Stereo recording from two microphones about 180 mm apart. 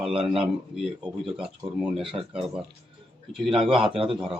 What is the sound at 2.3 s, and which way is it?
Speech, 5° right (ahead or behind).